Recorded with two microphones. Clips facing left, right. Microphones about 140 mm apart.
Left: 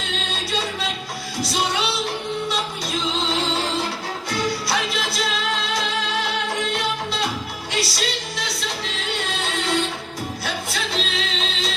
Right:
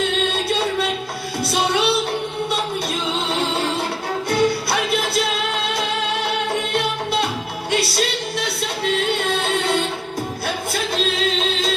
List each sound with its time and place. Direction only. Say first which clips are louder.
1.4 s music: right 4 dB; 60° right (ahead or behind)
6.7 s music: right 4 dB; 60° right (ahead or behind)